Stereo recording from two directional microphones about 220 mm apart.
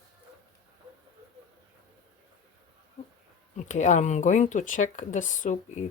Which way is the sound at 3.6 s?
35° left (ahead or behind).